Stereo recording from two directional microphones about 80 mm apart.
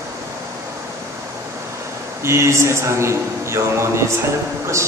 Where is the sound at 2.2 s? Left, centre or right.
Right.